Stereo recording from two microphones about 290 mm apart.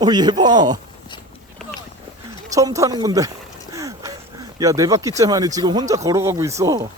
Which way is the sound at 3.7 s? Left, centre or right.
Centre.